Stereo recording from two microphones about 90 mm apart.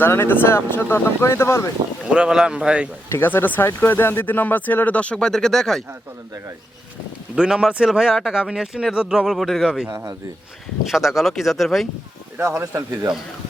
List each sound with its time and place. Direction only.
0.0 s speech: 25° left (ahead or behind)
2.1 s speech: 10° right (ahead or behind)
3.1 s speech: 25° left (ahead or behind); by 5.8 s 5° left (ahead or behind)
7.3 s speech: 10° right (ahead or behind)
12.4 s speech: 30° right (ahead or behind)